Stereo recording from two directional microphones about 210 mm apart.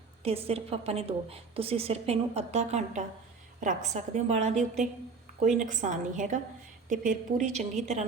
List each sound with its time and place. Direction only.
0.2 s a woman's voice: 30° right (ahead or behind)